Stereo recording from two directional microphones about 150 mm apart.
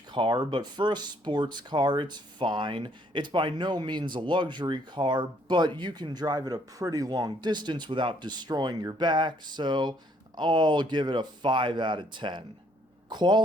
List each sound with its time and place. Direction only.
0.1 s speech: 30° right (ahead or behind)